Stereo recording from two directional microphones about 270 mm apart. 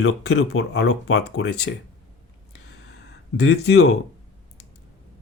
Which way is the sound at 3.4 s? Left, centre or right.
Left.